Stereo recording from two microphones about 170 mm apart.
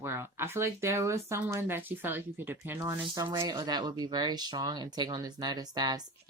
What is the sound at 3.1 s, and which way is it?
Speech, 25° right (ahead or behind).